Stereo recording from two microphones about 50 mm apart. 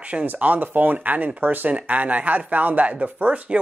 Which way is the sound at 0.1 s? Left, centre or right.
Right.